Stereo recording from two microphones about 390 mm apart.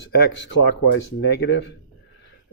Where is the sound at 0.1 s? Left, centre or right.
Left.